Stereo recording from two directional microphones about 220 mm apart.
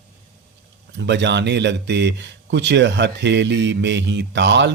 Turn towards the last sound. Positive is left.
turn(degrees=-55)  # may be behind; listen again after turning